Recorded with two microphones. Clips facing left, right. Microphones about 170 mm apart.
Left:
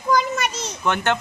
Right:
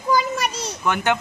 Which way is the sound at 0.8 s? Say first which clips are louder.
Even; 10° right (ahead or behind).